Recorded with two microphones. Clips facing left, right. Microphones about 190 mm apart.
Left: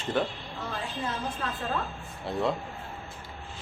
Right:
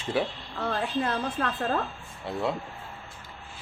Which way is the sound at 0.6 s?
65° right (ahead or behind).